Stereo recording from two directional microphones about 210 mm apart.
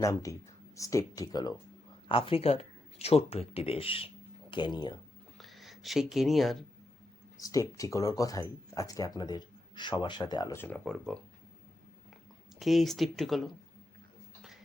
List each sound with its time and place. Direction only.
0.0 s speech: 15° left (ahead or behind)
5.4 s speech: centre (ahead or behind)
7.3 s speech: 15° left (ahead or behind)
12.5 s speech: centre (ahead or behind)